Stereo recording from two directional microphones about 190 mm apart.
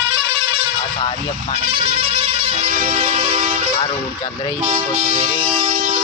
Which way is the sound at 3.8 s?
25° left (ahead or behind).